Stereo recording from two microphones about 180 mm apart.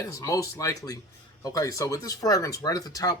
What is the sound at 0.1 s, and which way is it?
Speech, 20° left (ahead or behind).